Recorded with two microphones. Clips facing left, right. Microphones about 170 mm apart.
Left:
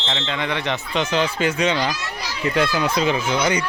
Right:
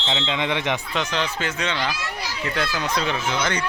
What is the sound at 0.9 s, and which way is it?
Speech, 5° left (ahead or behind).